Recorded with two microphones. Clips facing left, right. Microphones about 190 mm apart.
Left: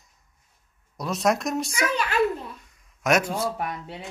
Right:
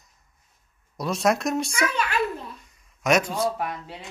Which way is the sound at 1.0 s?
Centre (ahead or behind).